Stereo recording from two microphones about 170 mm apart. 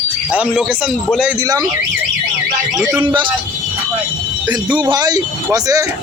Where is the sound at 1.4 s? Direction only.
20° right (ahead or behind).